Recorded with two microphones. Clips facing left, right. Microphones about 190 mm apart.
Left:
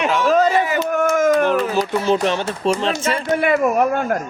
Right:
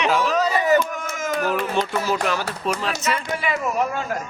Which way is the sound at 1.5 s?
Centre (ahead or behind).